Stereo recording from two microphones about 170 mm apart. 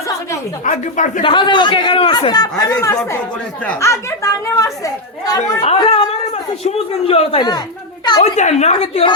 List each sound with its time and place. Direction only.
0.6 s speech: 50° left (ahead or behind)
1.2 s a man's voice: 30° left (ahead or behind)
8.2 s a woman's voice: 40° left (ahead or behind)